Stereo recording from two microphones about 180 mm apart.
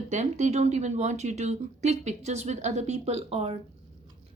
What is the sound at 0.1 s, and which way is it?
Speech, 40° right (ahead or behind).